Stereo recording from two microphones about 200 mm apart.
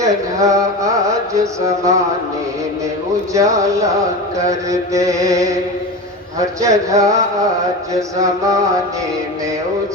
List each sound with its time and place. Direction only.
0.0 s music: 15° right (ahead or behind)
3.3 s mantra: 15° right (ahead or behind)